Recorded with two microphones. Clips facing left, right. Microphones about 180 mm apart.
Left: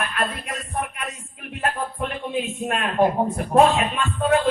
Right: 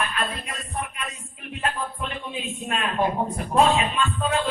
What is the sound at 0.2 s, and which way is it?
Music, 55° left (ahead or behind).